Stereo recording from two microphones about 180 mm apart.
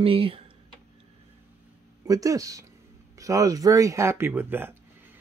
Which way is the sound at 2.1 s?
20° right (ahead or behind).